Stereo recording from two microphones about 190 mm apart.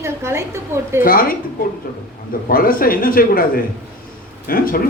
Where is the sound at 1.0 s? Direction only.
50° left (ahead or behind).